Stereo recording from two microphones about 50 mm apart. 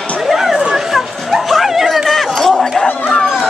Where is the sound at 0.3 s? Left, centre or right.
Centre.